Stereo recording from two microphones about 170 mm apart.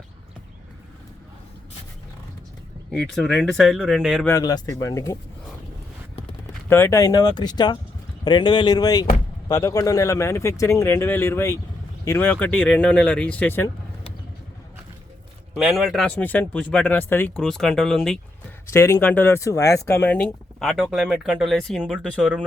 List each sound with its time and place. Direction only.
2.9 s speech: 5° left (ahead or behind)
4.3 s speech: 20° left (ahead or behind)
6.7 s speech: 15° left (ahead or behind)
15.5 s speech: centre (ahead or behind)
18.7 s speech: 15° left (ahead or behind); by 22.4 s 5° right (ahead or behind)